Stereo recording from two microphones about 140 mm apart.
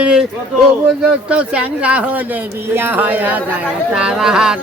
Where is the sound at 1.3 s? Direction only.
10° right (ahead or behind).